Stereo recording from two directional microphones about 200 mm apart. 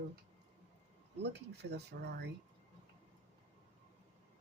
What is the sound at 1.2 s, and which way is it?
Speech, 55° right (ahead or behind).